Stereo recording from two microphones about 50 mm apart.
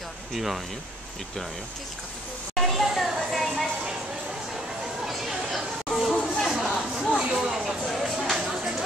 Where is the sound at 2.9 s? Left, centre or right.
Centre.